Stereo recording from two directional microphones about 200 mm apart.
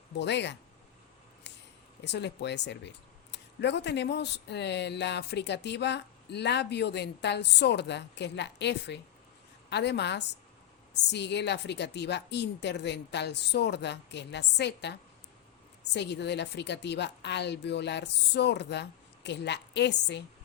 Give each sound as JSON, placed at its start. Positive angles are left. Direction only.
{"t": 0.2, "sound": "speech", "side_deg": 60}
{"t": 1.5, "sound": "a sound", "side_deg": 60}
{"t": 2.0, "sound": "speech", "side_deg": 60}